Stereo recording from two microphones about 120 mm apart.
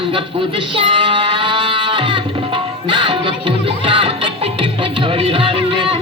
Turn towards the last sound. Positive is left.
turn(degrees=-45)  # may be behind; listen again after turning